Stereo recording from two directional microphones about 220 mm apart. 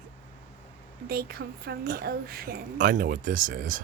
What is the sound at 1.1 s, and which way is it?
A woman's voice, 45° right (ahead or behind).